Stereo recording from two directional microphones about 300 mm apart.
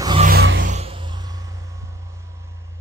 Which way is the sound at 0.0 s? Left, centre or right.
Centre.